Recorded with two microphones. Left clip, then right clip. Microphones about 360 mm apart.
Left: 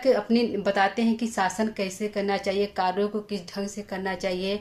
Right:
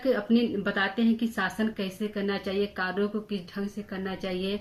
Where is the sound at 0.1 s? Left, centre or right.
Centre.